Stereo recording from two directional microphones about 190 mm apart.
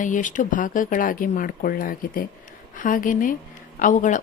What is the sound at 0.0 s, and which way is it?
A woman's voice, 40° left (ahead or behind).